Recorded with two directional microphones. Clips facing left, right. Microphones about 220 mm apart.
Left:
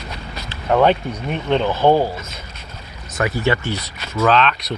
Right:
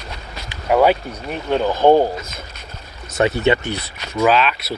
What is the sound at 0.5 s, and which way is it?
Speech, 10° right (ahead or behind).